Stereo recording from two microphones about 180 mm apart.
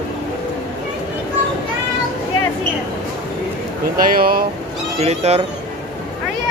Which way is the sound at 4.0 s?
55° right (ahead or behind).